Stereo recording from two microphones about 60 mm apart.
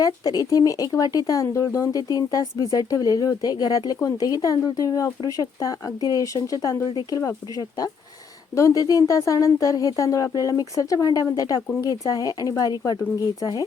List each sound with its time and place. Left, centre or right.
0.0 s speech: left
8.5 s speech: left
10.3 s speech: left